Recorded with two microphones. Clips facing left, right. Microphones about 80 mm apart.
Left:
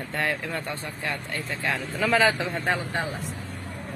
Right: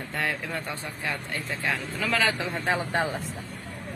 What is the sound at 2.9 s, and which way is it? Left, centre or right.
Speech, right.